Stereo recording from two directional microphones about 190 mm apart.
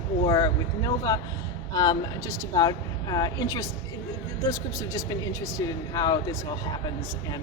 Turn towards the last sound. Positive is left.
turn(degrees=20)  # may be behind; listen again after turning